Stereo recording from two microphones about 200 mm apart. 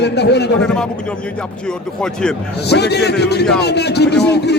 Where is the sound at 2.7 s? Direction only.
55° left (ahead or behind).